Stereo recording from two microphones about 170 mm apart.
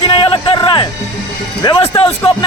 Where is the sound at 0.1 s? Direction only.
30° left (ahead or behind).